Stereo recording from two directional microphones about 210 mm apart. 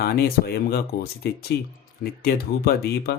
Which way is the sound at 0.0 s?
50° left (ahead or behind).